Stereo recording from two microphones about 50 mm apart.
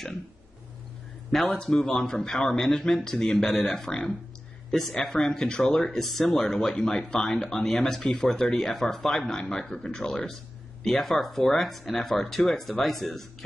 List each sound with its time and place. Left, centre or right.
1.3 s speech: centre
1.6 s speech: centre
5.1 s speech: centre